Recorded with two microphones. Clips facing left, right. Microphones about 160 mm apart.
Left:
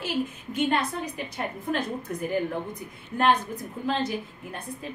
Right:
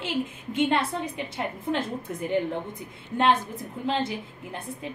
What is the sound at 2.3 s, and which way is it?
A woman's voice, 25° right (ahead or behind).